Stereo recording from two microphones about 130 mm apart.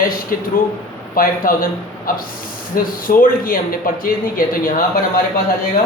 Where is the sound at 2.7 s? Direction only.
90° left.